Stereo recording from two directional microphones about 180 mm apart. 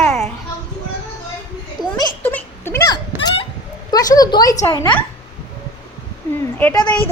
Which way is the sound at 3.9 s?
20° left (ahead or behind).